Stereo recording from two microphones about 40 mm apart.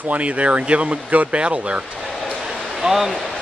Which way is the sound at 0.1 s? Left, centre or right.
Right.